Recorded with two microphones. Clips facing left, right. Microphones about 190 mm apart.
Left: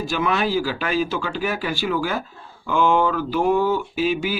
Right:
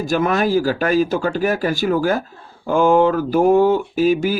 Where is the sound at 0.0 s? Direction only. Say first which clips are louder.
Right 4 dB; 45° right (ahead or behind).